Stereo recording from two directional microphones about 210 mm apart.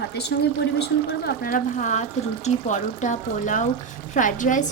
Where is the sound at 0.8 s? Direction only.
45° left (ahead or behind).